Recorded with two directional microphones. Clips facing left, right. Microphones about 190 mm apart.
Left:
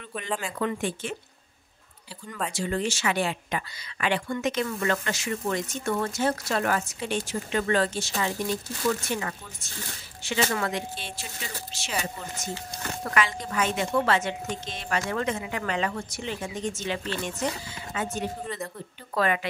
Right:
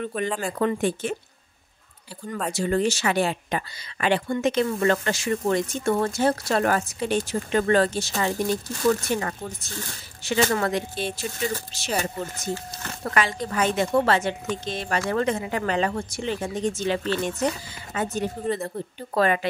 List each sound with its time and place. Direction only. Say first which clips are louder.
0.0 s speech: right 6 dB; 45° right (ahead or behind)
2.5 s speech: right 6 dB; 40° right (ahead or behind)